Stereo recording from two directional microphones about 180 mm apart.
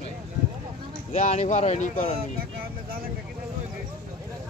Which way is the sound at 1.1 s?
40° left (ahead or behind).